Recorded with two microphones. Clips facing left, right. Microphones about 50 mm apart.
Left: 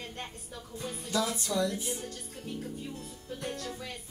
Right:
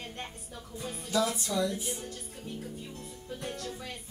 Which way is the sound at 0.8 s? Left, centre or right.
Centre.